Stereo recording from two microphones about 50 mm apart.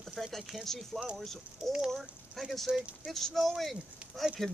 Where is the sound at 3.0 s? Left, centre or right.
Centre.